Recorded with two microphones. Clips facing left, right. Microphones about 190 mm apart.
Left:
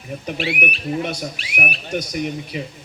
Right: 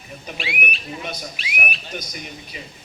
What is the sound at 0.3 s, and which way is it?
Speech, 40° left (ahead or behind).